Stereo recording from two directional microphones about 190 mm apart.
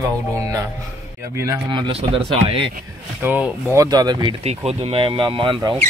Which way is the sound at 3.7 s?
20° right (ahead or behind).